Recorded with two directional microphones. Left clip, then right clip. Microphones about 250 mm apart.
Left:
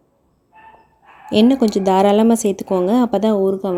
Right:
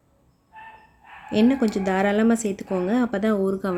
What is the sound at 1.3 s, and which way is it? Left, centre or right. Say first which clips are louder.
Speech: left 6 dB; centre.